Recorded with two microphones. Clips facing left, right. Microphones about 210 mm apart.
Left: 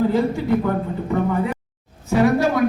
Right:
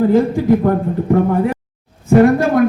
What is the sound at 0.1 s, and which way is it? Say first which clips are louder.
A man's voice: right 6 dB; 50° right (ahead or behind).